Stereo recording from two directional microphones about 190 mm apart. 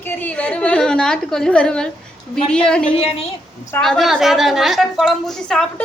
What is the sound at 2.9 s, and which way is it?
Speech, 30° left (ahead or behind).